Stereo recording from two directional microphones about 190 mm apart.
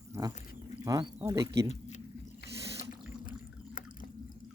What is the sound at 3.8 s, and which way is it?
Drip, 45° left (ahead or behind).